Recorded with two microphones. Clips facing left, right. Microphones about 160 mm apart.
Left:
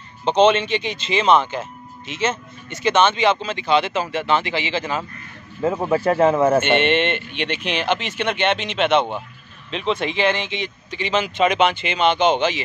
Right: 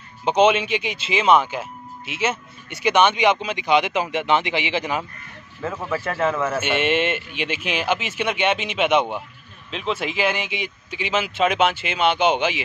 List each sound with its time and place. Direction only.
0.2 s speech: 10° right (ahead or behind)
5.6 s a man's voice: 30° left (ahead or behind)
6.6 s speech: 5° right (ahead or behind)